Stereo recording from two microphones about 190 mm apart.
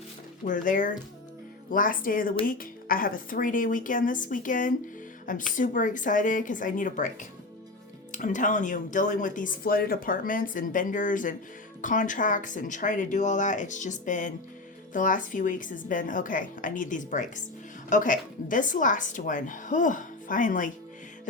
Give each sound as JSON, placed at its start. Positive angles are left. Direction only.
{"t": 0.4, "sound": "speech", "side_deg": 45}